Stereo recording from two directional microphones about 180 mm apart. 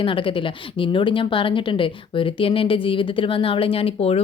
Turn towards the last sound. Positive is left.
turn(degrees=35)  # may be behind; listen again after turning